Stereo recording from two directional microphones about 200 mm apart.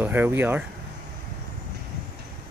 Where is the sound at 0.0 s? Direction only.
10° right (ahead or behind).